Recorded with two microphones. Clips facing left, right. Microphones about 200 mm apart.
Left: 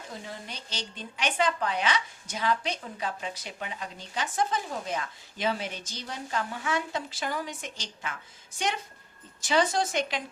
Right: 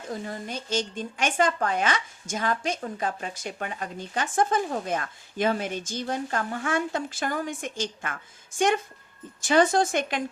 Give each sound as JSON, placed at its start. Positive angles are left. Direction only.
{"t": 0.3, "sound": "speech", "side_deg": -50}